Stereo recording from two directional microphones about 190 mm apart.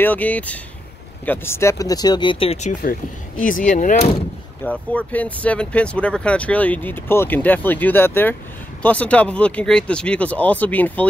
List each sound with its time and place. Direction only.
0.0 s speech: 10° left (ahead or behind); by 2.7 s 30° left (ahead or behind)
2.8 s speech: 45° left (ahead or behind)
4.6 s speech: 10° left (ahead or behind)